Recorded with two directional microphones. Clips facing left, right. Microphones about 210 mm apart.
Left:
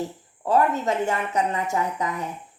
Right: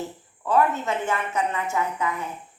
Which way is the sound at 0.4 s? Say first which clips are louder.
Left 1 dB; 40° left (ahead or behind).